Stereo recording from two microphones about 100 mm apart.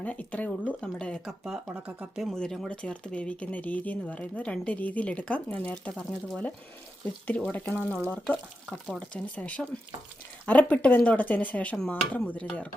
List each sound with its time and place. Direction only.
0.0 s speech: 15° left (ahead or behind)
1.6 s speech: 15° right (ahead or behind)
2.1 s speech: 5° right (ahead or behind)
2.4 s speech: 10° left (ahead or behind)
5.9 s speech: 5° left (ahead or behind)
7.5 s speech: 20° left (ahead or behind)